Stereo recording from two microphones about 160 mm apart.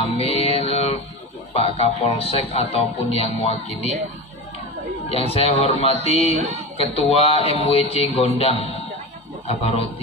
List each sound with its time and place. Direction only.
0.0 s mantra: 35° left (ahead or behind)
1.5 s speech: 35° left (ahead or behind)
5.1 s speech: 35° left (ahead or behind)